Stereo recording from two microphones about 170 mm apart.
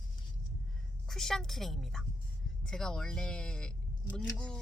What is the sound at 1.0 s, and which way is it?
Speech, 5° left (ahead or behind).